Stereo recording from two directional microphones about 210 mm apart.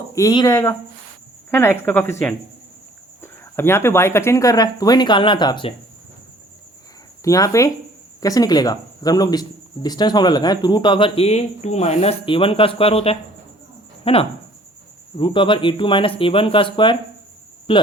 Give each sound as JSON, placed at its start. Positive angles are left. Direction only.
{"t": 0.1, "sound": "speech", "side_deg": 15}
{"t": 7.3, "sound": "speech", "side_deg": 15}